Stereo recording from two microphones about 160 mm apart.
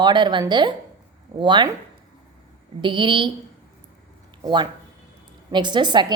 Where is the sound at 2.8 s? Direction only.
30° right (ahead or behind).